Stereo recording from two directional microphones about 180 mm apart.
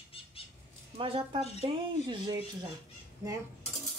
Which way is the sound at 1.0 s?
30° right (ahead or behind).